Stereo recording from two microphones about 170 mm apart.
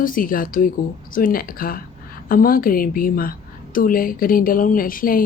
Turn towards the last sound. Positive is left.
turn(degrees=55)  # may be behind; listen again after turning